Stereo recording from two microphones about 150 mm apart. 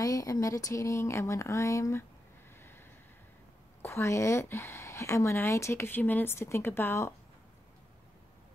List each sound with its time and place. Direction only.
0.0 s speech: 25° left (ahead or behind)
3.8 s speech: 20° left (ahead or behind)